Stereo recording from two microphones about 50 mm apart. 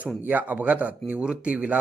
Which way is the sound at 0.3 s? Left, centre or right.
Right.